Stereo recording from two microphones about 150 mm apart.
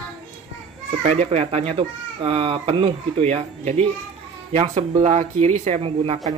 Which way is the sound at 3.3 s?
50° right (ahead or behind).